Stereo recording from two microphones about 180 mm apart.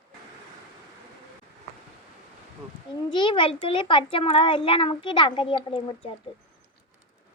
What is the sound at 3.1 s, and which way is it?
A child's voice, 25° left (ahead or behind).